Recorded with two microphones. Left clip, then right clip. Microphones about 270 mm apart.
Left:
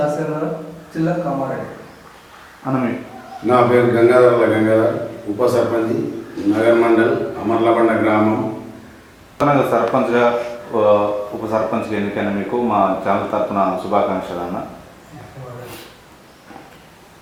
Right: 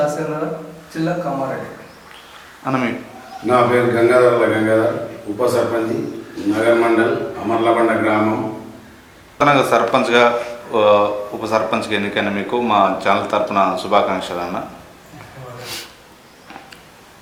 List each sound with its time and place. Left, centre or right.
0.0 s speech: centre
2.6 s speech: centre